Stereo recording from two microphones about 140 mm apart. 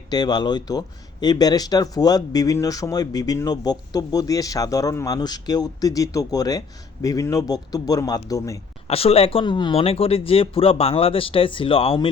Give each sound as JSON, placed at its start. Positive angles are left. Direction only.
{"t": 0.1, "sound": "speech", "side_deg": 30}
{"t": 8.9, "sound": "speech", "side_deg": 45}
{"t": 9.7, "sound": "speech", "side_deg": 45}